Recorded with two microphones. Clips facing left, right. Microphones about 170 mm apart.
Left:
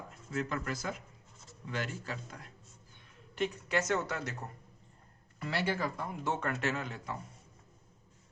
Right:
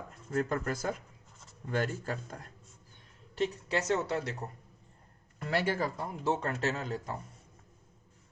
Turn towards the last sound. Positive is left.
turn(degrees=-40)  # may be behind; listen again after turning